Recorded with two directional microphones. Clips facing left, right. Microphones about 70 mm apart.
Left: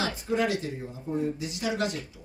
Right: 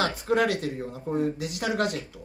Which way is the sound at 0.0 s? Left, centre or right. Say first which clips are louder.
Right 3 dB; right.